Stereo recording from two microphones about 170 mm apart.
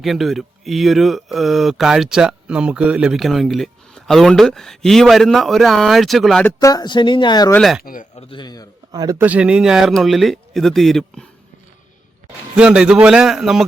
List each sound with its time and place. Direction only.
0.0 s speech: centre (ahead or behind)
6.4 s speech: 20° left (ahead or behind)
7.5 s speech: centre (ahead or behind)
7.8 s a man's voice: 55° left (ahead or behind)
8.1 s speech: 30° left (ahead or behind)
8.9 s a man's voice: 20° right (ahead or behind)
9.2 s speech: 5° right (ahead or behind)
12.5 s speech: 5° right (ahead or behind)